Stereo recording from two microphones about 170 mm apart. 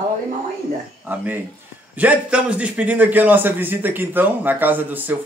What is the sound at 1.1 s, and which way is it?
A man's voice, 10° right (ahead or behind).